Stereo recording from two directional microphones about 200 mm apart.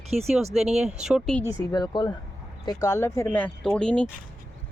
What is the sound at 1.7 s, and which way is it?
Speech, 20° left (ahead or behind).